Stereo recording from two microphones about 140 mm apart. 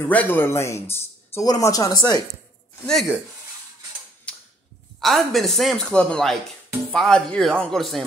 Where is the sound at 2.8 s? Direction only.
Centre (ahead or behind).